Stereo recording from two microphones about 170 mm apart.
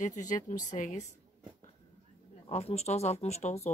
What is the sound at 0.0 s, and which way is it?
A woman's voice, 45° left (ahead or behind).